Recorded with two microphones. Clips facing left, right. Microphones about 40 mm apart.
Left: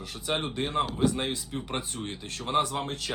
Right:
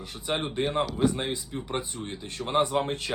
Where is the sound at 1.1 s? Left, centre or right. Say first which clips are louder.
Even; centre.